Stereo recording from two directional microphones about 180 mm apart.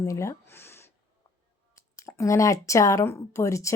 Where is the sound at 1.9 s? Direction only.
15° left (ahead or behind).